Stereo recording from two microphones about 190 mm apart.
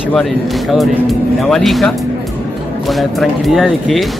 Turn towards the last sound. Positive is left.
turn(degrees=0)  # may be behind; listen again after turning